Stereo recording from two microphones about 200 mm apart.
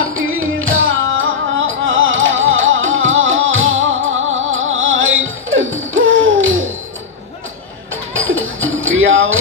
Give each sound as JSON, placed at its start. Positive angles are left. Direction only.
{"t": 0.0, "sound": "music", "side_deg": -90}
{"t": 1.9, "sound": "flamenco", "side_deg": -80}
{"t": 8.1, "sound": "music", "side_deg": -85}